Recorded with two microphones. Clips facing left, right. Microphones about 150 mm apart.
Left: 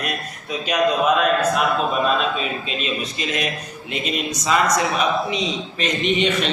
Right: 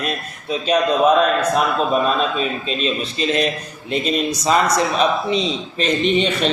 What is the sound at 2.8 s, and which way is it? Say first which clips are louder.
A man's voice: right 7 dB; 30° right (ahead or behind).